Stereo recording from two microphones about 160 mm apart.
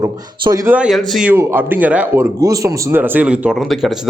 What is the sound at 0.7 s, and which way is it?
Speech, 5° right (ahead or behind).